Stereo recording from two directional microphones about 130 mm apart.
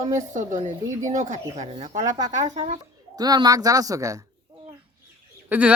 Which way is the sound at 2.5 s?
55° right (ahead or behind).